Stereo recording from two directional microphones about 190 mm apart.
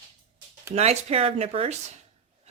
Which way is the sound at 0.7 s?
35° right (ahead or behind).